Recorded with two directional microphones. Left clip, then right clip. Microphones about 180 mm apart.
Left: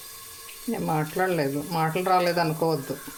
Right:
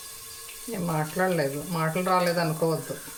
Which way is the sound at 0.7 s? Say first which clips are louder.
Left 3 dB; 40° left (ahead or behind).